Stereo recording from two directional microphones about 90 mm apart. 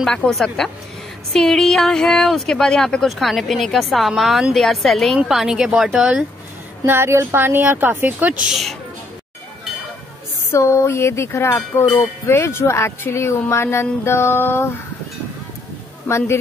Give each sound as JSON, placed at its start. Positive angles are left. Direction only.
{"t": 0.0, "sound": "speech", "side_deg": 0}
{"t": 6.9, "sound": "speech", "side_deg": -30}
{"t": 10.5, "sound": "speech", "side_deg": 30}
{"t": 16.1, "sound": "speech", "side_deg": 30}